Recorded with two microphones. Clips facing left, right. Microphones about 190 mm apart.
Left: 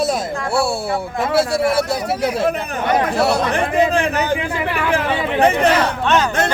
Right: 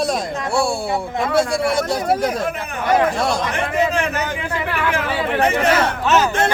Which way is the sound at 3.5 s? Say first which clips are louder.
Left 3 dB; 35° left (ahead or behind).